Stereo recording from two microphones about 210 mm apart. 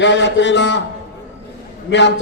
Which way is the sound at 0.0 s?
55° left (ahead or behind).